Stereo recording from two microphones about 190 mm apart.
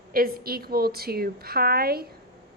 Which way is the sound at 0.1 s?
50° right (ahead or behind).